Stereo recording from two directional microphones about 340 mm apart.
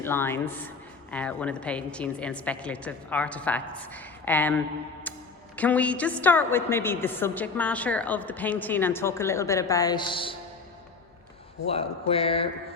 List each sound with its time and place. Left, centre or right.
0.0 s a woman's voice: centre
5.1 s music: centre
5.5 s a woman's voice: centre
11.7 s speech: centre